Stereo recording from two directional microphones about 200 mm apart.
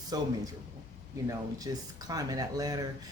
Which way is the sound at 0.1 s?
20° right (ahead or behind).